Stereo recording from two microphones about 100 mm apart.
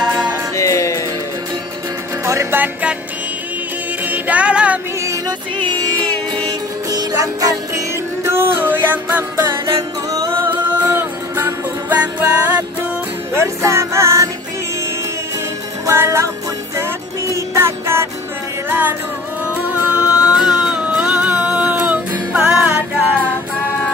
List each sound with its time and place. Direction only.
0.0 s music: 45° right (ahead or behind)
0.6 s music: 30° left (ahead or behind)
2.2 s music: 25° right (ahead or behind)
4.0 s music: 15° right (ahead or behind)
6.9 s music: 35° right (ahead or behind); by 9.2 s 20° right (ahead or behind)
9.4 s music: 35° right (ahead or behind)
10.4 s music: 20° right (ahead or behind)
13.4 s music: 30° right (ahead or behind)
15.9 s music: 25° right (ahead or behind)
17.3 s music: 25° right (ahead or behind)